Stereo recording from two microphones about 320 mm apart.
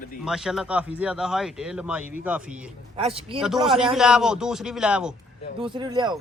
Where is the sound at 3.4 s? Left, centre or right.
Centre.